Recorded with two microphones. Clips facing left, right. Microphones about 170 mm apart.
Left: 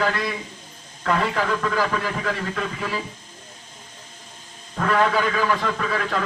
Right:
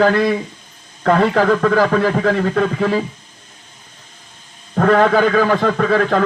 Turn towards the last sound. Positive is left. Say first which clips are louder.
# right 10 dB
turn(degrees=-45)  # may be behind; listen again after turning